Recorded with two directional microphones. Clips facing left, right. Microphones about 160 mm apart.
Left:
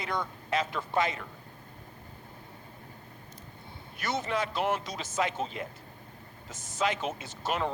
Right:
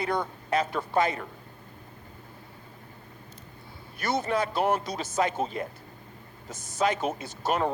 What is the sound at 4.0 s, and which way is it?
Speech, 40° right (ahead or behind).